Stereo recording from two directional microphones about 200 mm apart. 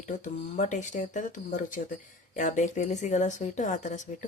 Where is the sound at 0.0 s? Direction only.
40° left (ahead or behind).